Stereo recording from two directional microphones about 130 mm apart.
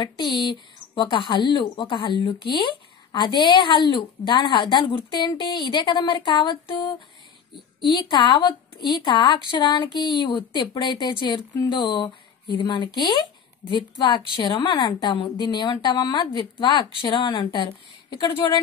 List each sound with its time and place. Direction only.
0.0 s a woman's voice: 35° left (ahead or behind)